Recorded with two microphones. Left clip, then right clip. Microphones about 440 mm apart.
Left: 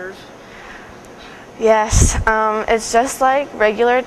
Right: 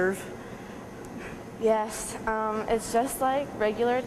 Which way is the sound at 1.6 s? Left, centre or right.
Left.